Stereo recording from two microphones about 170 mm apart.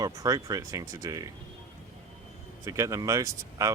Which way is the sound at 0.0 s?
20° right (ahead or behind).